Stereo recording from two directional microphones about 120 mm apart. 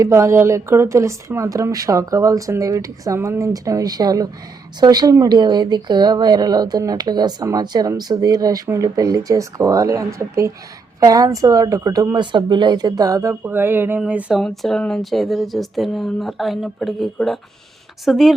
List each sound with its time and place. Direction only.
0.0 s speech: 25° right (ahead or behind)
13.4 s a sound: 20° right (ahead or behind)
14.3 s speech: centre (ahead or behind)